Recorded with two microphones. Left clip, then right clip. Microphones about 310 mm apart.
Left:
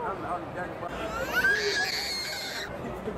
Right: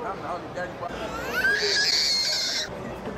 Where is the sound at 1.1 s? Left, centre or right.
Centre.